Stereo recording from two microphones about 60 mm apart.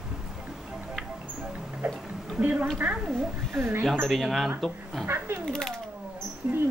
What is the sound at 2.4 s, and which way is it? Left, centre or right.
Speech, right.